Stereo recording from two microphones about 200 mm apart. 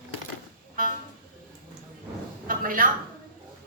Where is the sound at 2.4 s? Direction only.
45° right (ahead or behind).